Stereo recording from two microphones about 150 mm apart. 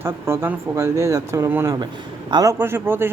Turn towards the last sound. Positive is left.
turn(degrees=-15)  # may be behind; listen again after turning